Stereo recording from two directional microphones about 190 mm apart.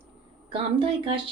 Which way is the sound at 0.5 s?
25° right (ahead or behind).